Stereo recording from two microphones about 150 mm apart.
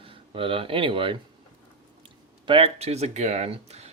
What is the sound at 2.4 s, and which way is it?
Speech, 35° right (ahead or behind).